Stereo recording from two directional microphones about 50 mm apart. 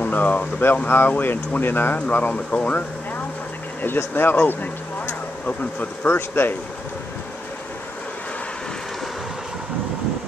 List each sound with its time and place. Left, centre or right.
0.0 s speech: left
2.0 s speech: left
3.8 s speech: left
6.0 s speech: left